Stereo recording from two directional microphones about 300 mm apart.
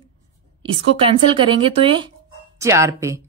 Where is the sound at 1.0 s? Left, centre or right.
Centre.